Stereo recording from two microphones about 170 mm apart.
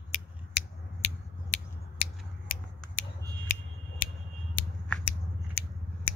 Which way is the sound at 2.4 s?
55° left (ahead or behind).